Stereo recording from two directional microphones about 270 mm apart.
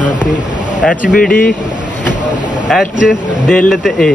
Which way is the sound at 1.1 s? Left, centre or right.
Left.